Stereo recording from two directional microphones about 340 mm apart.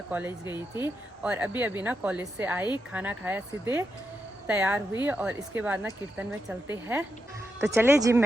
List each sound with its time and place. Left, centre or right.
0.1 s a woman's voice: centre